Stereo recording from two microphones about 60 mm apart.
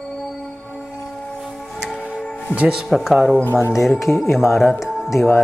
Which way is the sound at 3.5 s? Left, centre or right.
Left.